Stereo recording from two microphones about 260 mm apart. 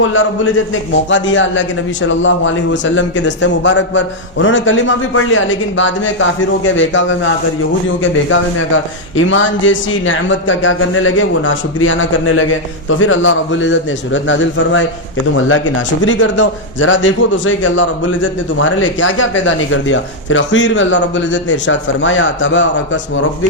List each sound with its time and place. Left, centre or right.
0.0 s a man's voice: left
8.3 s a man's voice: left
16.0 s a man's voice: left